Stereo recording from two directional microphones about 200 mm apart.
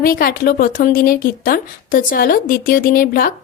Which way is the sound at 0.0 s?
45° left (ahead or behind).